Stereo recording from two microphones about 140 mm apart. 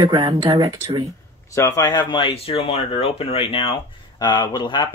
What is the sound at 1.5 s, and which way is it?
Speech, 20° left (ahead or behind).